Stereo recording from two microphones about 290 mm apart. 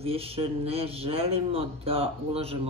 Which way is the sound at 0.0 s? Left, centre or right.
Centre.